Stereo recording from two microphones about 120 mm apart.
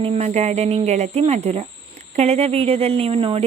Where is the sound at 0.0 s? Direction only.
60° right (ahead or behind).